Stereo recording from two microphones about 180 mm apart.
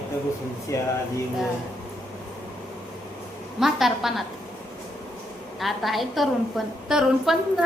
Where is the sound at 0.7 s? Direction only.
15° left (ahead or behind).